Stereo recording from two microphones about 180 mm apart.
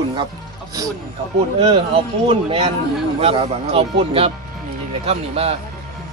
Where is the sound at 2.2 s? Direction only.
35° right (ahead or behind).